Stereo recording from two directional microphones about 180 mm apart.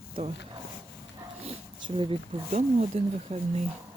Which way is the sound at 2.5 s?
40° right (ahead or behind).